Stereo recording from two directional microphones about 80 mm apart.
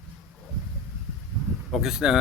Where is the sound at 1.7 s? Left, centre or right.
Centre.